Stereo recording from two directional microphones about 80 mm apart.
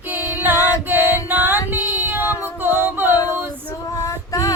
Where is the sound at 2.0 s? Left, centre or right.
Right.